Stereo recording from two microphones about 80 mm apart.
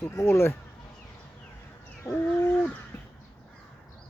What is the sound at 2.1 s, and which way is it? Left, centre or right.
Speech, left.